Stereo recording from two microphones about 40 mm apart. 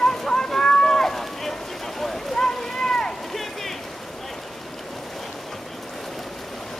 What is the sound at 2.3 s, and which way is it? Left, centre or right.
Boat, centre.